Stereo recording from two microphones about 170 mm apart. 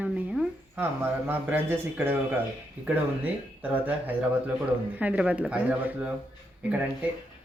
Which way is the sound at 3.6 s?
10° right (ahead or behind).